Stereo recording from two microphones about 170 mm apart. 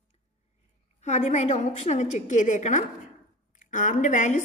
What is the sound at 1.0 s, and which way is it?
A woman's voice, 40° left (ahead or behind).